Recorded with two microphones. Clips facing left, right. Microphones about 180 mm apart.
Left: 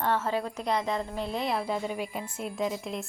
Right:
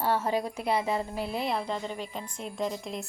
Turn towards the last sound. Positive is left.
turn(degrees=0)  # may be behind; listen again after turning